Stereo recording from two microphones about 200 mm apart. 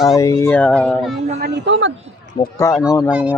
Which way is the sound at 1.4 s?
55° right (ahead or behind).